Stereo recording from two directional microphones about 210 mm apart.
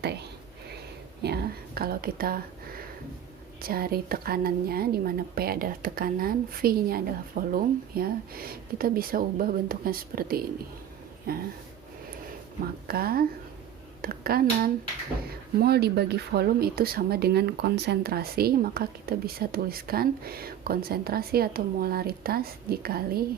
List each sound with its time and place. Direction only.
0.0 s speech: 50° right (ahead or behind)
1.2 s a sound: 50° right (ahead or behind)
3.6 s speech: 45° right (ahead or behind)
12.9 s a woman's voice: 45° right (ahead or behind)